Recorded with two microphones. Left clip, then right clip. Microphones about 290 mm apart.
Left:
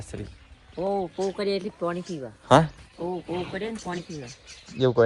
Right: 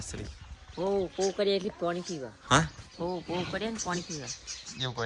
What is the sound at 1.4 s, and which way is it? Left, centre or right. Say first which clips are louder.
Speech: even; left.